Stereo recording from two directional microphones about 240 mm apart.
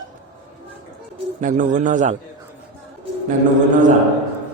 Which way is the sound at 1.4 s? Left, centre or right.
Right.